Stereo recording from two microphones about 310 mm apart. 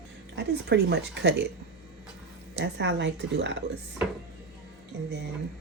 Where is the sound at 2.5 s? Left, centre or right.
Right.